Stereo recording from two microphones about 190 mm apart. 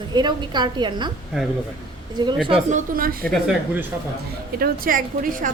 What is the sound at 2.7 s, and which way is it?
Speech, 50° right (ahead or behind).